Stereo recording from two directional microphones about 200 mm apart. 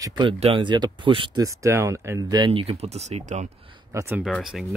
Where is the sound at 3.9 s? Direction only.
10° right (ahead or behind).